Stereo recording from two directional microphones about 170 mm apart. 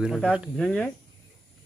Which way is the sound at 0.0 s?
Centre (ahead or behind).